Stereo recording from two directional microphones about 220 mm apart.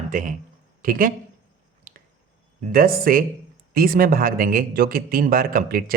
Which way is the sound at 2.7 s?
40° right (ahead or behind).